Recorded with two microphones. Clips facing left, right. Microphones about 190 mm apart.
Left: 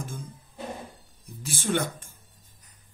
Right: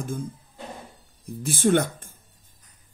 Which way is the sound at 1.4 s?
55° right (ahead or behind).